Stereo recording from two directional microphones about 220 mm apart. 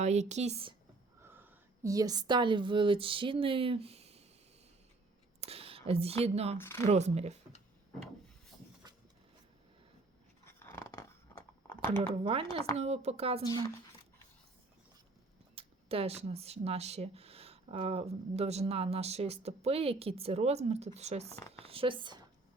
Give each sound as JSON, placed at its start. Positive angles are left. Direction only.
{"t": 0.0, "sound": "speech", "side_deg": -30}
{"t": 1.2, "sound": "a woman's voice", "side_deg": -10}
{"t": 5.4, "sound": "speech", "side_deg": -25}
{"t": 6.6, "sound": "speech", "side_deg": 10}
{"t": 6.8, "sound": "speech", "side_deg": -30}
{"t": 10.4, "sound": "a sound", "side_deg": 10}
{"t": 11.9, "sound": "speech", "side_deg": -25}
{"t": 15.5, "sound": "speech", "side_deg": -25}